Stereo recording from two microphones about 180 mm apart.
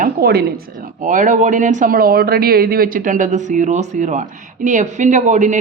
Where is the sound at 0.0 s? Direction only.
60° right (ahead or behind).